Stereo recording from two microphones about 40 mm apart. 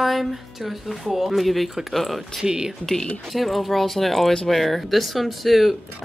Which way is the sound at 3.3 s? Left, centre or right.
Centre.